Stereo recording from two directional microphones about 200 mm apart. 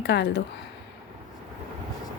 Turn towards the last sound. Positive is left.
turn(degrees=60)  # may be behind; listen again after turning